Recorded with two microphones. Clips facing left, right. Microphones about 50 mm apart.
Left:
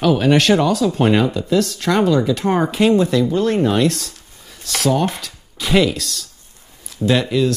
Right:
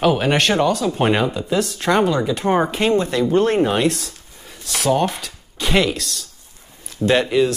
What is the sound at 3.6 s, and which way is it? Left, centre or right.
Speech, centre.